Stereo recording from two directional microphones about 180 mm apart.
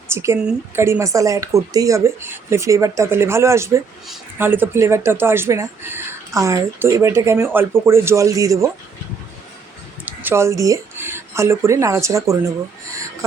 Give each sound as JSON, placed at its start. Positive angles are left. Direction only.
{"t": 0.1, "sound": "speech", "side_deg": -15}
{"t": 10.1, "sound": "speech", "side_deg": -10}